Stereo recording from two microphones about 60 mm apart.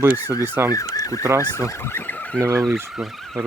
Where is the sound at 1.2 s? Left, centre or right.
Right.